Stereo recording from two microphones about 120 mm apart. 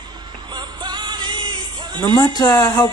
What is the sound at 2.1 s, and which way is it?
Speech, 35° left (ahead or behind).